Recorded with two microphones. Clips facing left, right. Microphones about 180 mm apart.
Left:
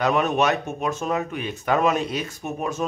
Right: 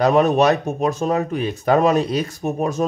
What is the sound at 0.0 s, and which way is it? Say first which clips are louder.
Speech: right 6 dB; 35° right (ahead or behind).